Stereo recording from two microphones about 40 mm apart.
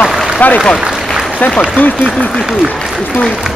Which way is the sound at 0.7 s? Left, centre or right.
Centre.